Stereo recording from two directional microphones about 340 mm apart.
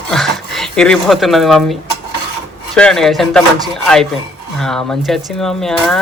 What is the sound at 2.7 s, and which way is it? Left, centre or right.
Speech, centre.